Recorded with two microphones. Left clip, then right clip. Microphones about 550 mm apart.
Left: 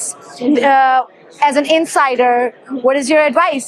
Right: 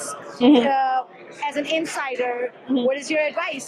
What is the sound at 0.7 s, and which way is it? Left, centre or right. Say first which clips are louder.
Speech: left 10 dB; left.